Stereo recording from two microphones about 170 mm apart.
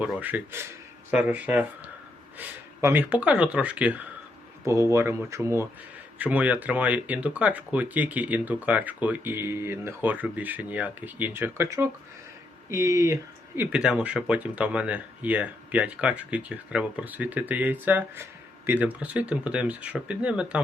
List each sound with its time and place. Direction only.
0.0 s speech: 10° right (ahead or behind)
13.6 s speech: 5° right (ahead or behind)